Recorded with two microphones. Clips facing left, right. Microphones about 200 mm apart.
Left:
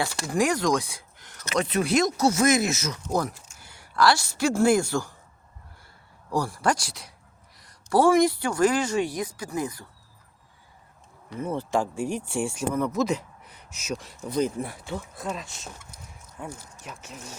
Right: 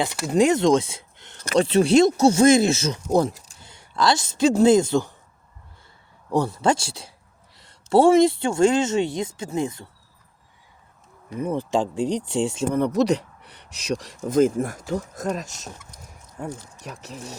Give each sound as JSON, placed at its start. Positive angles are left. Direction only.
{"t": 0.3, "sound": "speech", "side_deg": -25}
{"t": 6.3, "sound": "speech", "side_deg": -20}
{"t": 11.3, "sound": "speech", "side_deg": -15}
{"t": 12.7, "sound": "speech", "side_deg": -35}
{"t": 13.1, "sound": "a sound", "side_deg": -75}
{"t": 13.8, "sound": "speech", "side_deg": -90}
{"t": 14.3, "sound": "speech", "side_deg": -45}
{"t": 16.8, "sound": "speech", "side_deg": -35}